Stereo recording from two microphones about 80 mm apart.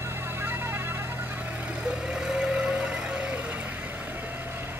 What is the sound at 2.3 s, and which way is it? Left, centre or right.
Vehicle, centre.